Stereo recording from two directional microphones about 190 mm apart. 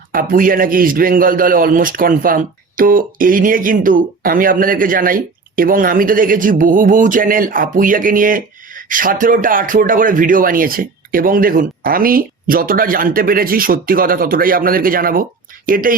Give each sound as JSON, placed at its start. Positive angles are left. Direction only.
{"t": 0.1, "sound": "a man's voice", "side_deg": -50}